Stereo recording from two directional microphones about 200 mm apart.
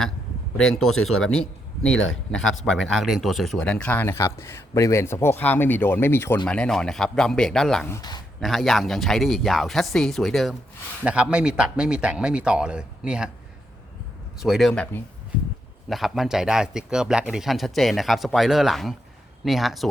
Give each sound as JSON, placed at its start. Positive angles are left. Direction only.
{"t": 0.8, "sound": "a man's voice", "side_deg": 0}
{"t": 7.9, "sound": "speech", "side_deg": 20}
{"t": 8.4, "sound": "a man's voice", "side_deg": 0}
{"t": 14.4, "sound": "a man's voice", "side_deg": 0}